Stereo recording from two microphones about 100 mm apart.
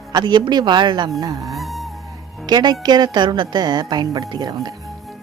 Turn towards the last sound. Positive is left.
turn(degrees=-45)  # may be behind; listen again after turning